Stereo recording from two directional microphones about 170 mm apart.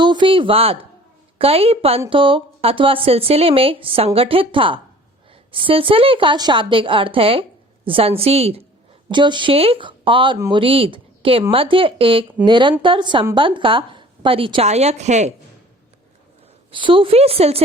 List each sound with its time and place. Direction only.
0.0 s speech: 25° right (ahead or behind)
16.7 s speech: 30° right (ahead or behind)